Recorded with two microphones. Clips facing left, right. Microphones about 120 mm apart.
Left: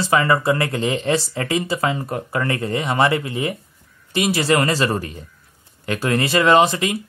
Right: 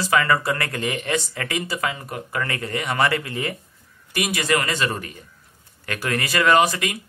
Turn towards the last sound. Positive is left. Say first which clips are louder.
# left 3 dB
turn(degrees=25)  # may be behind; listen again after turning